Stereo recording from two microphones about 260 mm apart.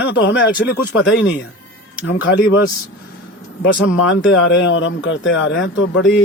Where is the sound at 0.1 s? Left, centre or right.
Left.